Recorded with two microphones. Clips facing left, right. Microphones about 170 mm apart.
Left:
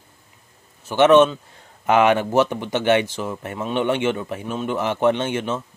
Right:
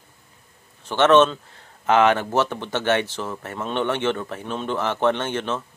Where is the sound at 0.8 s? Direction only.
10° left (ahead or behind).